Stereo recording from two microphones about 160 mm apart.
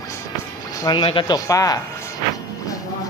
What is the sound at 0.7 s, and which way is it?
Music, 25° left (ahead or behind).